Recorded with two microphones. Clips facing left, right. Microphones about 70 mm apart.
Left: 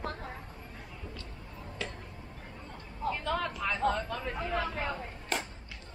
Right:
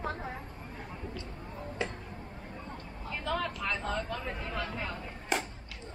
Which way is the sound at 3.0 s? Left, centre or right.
Centre.